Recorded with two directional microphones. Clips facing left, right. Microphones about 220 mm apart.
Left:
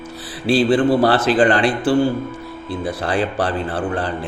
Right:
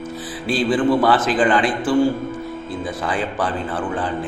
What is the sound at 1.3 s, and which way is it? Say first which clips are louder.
Speech: left 2 dB; 65° left (ahead or behind).